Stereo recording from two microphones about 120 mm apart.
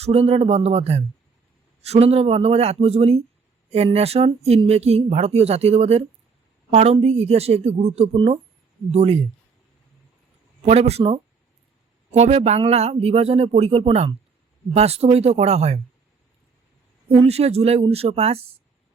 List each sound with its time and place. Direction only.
0.0 s speech: 60° right (ahead or behind)
8.1 s speech: 45° right (ahead or behind)
8.9 s speech: 60° right (ahead or behind)
10.7 s speech: 60° right (ahead or behind)
17.2 s speech: 60° right (ahead or behind)